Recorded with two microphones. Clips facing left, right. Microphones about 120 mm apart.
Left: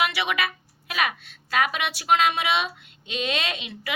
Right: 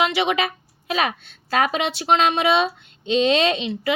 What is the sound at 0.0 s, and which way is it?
A woman's voice, 25° right (ahead or behind).